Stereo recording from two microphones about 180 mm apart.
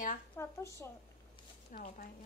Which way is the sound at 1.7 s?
50° left (ahead or behind).